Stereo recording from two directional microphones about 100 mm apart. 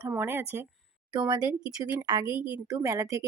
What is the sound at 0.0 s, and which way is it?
Speech, 20° right (ahead or behind).